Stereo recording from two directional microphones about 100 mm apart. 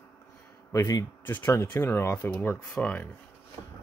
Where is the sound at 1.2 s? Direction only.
20° left (ahead or behind).